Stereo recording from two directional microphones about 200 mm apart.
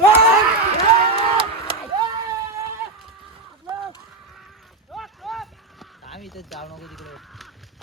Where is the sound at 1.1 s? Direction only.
30° right (ahead or behind).